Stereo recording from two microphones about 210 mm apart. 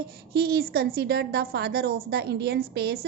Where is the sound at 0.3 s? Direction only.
50° right (ahead or behind).